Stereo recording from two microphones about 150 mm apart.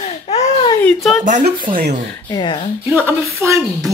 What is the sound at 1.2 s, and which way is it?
Speech, 55° right (ahead or behind).